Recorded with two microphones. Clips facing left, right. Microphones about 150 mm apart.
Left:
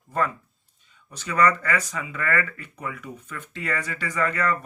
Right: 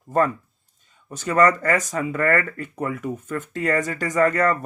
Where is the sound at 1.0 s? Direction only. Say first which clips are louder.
Right 4 dB; 45° right (ahead or behind).